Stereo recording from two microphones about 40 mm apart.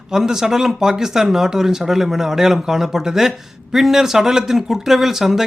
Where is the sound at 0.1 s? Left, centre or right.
Centre.